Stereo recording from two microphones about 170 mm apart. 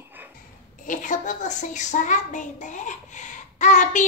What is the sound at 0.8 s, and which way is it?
A child's voice, 50° left (ahead or behind).